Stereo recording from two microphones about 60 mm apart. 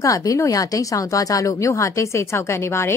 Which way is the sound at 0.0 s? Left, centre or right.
Left.